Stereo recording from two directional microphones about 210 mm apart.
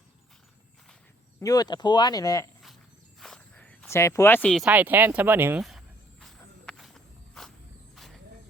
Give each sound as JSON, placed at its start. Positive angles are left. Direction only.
{"t": 1.4, "sound": "speech", "side_deg": 15}
{"t": 3.2, "sound": "a sound", "side_deg": 5}
{"t": 7.9, "sound": "vehicle", "side_deg": 0}